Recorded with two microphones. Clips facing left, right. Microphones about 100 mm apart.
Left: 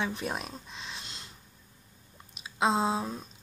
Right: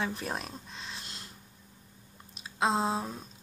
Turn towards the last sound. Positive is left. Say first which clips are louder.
# left 1 dB
turn(degrees=5)  # may be behind; listen again after turning